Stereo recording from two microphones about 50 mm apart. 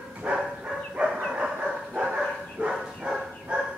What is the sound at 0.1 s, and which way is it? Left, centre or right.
Bow-wow, right.